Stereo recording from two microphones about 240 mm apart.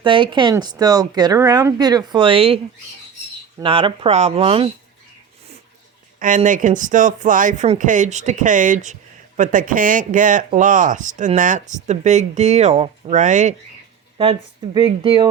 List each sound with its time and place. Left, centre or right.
0.0 s speech: right
3.6 s speech: right
6.1 s speech: right